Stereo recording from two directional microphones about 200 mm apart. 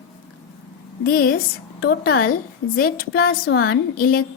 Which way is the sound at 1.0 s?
50° left (ahead or behind).